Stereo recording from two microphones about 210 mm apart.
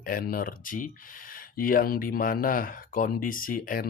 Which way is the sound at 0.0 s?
40° left (ahead or behind).